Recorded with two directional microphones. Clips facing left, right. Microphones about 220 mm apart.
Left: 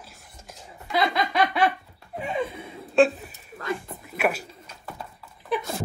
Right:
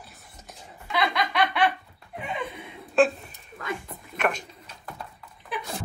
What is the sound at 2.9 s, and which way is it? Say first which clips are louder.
Chuckle: left 2 dB; centre (ahead or behind).